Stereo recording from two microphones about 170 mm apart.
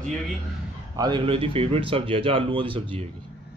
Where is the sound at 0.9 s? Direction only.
25° right (ahead or behind).